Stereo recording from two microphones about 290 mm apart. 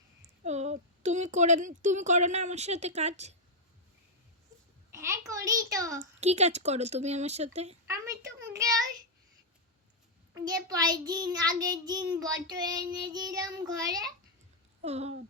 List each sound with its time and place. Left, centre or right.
0.4 s a woman's voice: right
4.9 s a child's voice: centre
5.7 s child singing: centre
6.0 s a woman's voice: right
7.9 s a sound: centre
8.5 s child singing: centre
10.3 s child singing: centre
14.8 s speech: right